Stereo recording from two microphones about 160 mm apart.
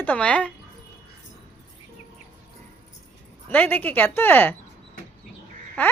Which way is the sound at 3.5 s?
10° left (ahead or behind).